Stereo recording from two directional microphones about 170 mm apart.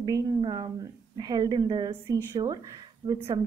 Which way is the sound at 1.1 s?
25° right (ahead or behind).